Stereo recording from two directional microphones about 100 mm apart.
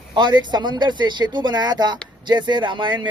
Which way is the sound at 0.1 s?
45° right (ahead or behind).